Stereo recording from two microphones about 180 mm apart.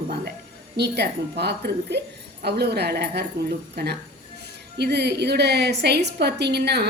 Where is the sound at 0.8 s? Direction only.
70° right (ahead or behind).